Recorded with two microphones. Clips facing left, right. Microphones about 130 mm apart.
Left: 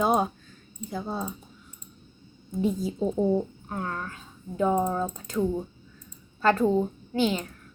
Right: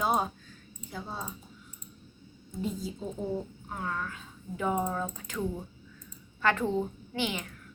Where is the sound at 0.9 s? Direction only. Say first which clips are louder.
Left 7 dB; 40° left (ahead or behind).